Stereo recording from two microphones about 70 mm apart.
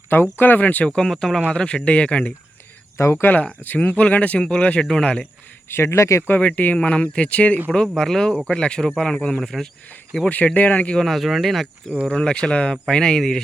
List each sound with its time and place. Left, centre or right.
0.1 s speech: left
0.9 s speech: centre
3.0 s speech: left; by 5.2 s centre
5.6 s speech: left
6.2 s speech: left
7.7 s speech: centre
10.2 s speech: left
11.0 s speech: centre
12.0 s speech: centre